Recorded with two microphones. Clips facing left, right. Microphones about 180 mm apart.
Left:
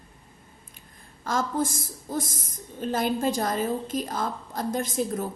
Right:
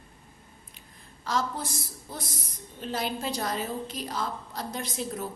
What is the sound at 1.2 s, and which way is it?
A woman's voice, 50° left (ahead or behind).